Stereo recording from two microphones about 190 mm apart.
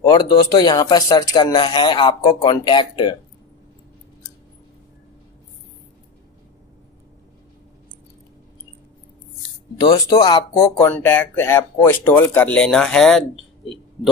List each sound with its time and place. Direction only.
0.0 s speech: 20° left (ahead or behind)
9.8 s speech: 20° left (ahead or behind); by 13.7 s centre (ahead or behind)